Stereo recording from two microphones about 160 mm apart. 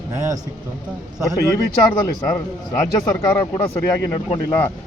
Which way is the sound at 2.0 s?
25° left (ahead or behind).